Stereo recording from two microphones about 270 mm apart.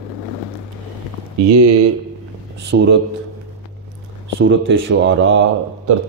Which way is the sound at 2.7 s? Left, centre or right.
Right.